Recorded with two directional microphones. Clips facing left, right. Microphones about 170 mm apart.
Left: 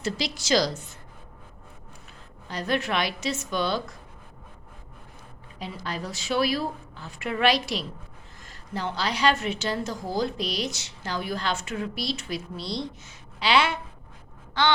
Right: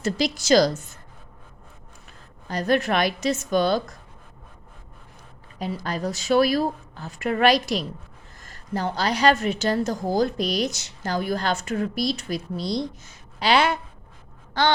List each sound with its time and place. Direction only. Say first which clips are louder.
0.0 s a woman's voice: right 6 dB; 45° right (ahead or behind)
2.5 s a woman's voice: right 5 dB; 45° right (ahead or behind)
5.5 s a woman's voice: right 5 dB; 45° right (ahead or behind)
14.6 s a sound: right 2 dB; 40° right (ahead or behind)